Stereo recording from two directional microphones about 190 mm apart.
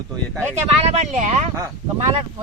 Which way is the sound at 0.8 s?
35° right (ahead or behind).